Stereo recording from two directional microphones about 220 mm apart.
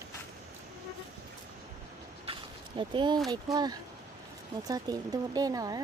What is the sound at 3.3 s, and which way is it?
Speech, 20° right (ahead or behind).